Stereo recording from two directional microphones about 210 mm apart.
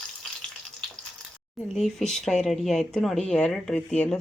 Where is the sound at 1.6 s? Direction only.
Centre (ahead or behind).